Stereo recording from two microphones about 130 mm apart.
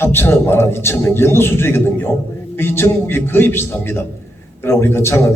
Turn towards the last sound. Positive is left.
turn(degrees=20)  # may be behind; listen again after turning